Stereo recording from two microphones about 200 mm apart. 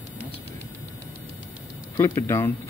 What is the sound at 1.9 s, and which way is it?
Speech, 15° left (ahead or behind).